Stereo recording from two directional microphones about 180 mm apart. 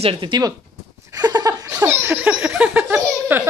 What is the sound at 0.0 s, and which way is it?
Speech, 30° right (ahead or behind).